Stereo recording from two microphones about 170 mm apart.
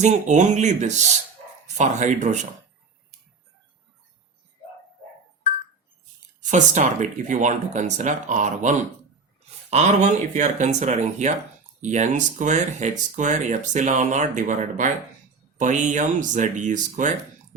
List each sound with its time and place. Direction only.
0.0 s speech: 45° right (ahead or behind)
6.4 s speech: 45° right (ahead or behind)